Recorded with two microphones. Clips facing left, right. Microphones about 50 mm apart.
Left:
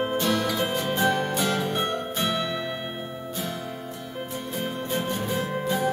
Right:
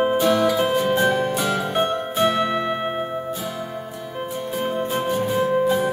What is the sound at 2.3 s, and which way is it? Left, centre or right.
Music, right.